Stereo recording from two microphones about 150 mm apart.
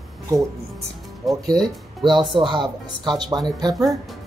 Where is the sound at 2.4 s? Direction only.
30° right (ahead or behind).